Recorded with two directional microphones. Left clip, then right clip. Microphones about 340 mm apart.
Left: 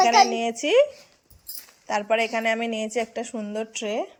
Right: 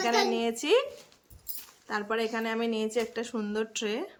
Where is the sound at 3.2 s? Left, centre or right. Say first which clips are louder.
Left 2 dB; centre.